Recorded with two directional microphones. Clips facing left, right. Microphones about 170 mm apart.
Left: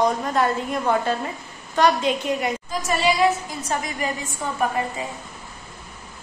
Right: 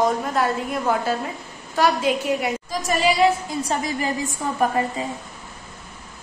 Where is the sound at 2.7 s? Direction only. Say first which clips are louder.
Right 1 dB; 35° right (ahead or behind).